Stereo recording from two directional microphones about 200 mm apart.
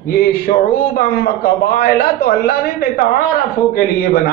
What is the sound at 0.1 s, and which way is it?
A man's voice, 50° left (ahead or behind).